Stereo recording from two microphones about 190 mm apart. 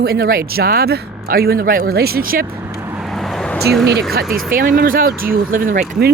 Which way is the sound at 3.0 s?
Centre (ahead or behind).